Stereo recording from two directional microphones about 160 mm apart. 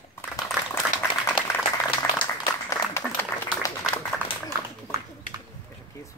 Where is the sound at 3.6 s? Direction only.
20° left (ahead or behind).